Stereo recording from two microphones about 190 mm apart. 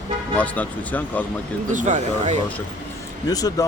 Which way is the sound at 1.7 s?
40° right (ahead or behind).